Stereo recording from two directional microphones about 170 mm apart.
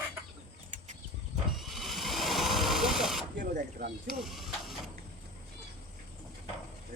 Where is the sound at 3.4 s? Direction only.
55° right (ahead or behind).